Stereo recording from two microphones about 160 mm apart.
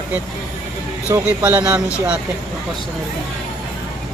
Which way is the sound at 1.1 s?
10° right (ahead or behind).